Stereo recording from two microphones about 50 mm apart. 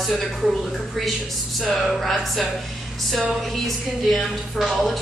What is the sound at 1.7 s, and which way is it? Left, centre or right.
Speech, centre.